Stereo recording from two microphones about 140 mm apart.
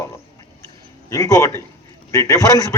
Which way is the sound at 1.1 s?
25° left (ahead or behind).